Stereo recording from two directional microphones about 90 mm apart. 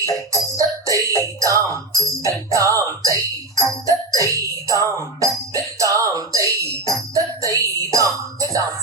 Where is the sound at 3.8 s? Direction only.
35° right (ahead or behind).